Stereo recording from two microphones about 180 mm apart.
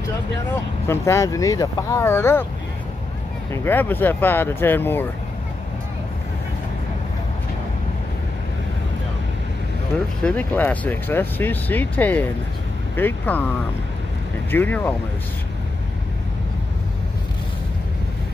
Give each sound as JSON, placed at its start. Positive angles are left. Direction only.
{"t": 0.8, "sound": "speech", "side_deg": 15}
{"t": 3.5, "sound": "speech", "side_deg": 10}
{"t": 10.2, "sound": "speech", "side_deg": 10}
{"t": 14.5, "sound": "speech", "side_deg": 10}